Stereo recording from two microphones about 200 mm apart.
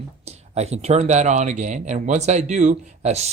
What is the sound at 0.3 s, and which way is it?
Speech, 30° right (ahead or behind).